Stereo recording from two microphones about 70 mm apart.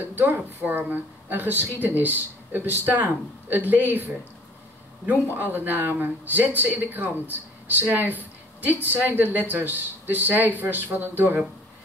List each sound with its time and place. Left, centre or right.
0.1 s speech: right